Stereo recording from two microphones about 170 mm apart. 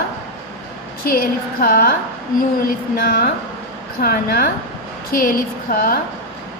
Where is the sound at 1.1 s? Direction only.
60° left (ahead or behind).